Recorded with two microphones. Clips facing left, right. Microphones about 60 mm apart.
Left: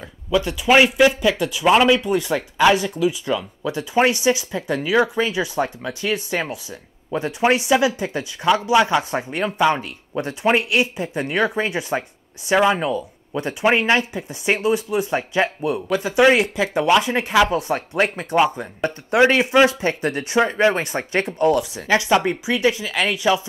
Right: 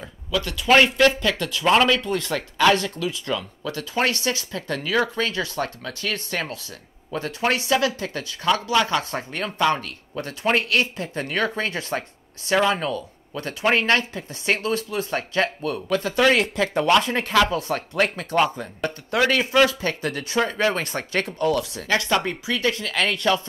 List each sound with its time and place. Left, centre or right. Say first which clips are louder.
0.3 s speech: left 2 dB; centre